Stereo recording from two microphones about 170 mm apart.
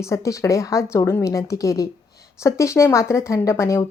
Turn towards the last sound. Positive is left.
turn(degrees=15)  # may be behind; listen again after turning